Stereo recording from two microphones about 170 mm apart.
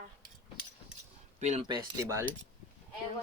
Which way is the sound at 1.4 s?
40° right (ahead or behind).